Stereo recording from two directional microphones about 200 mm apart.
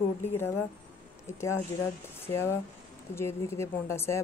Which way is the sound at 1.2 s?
15° left (ahead or behind).